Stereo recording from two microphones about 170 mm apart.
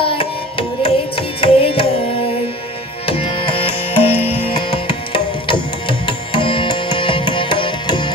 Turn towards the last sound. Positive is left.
turn(degrees=30)  # may be behind; listen again after turning